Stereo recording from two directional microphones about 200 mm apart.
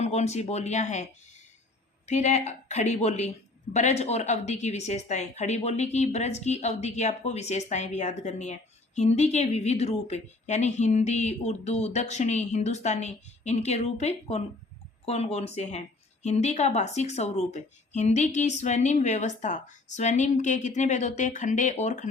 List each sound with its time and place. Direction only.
0.0 s a woman's voice: 35° left (ahead or behind)